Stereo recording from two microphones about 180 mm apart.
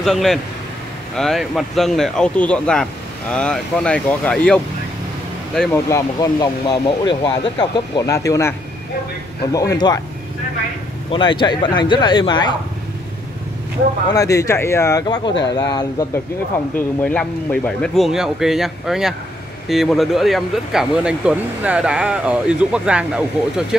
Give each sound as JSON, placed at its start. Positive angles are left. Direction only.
{"t": 0.0, "sound": "speech", "side_deg": 0}
{"t": 5.9, "sound": "speech", "side_deg": 20}
{"t": 11.1, "sound": "speech", "side_deg": 25}
{"t": 14.1, "sound": "speech", "side_deg": 20}
{"t": 17.0, "sound": "speech", "side_deg": 10}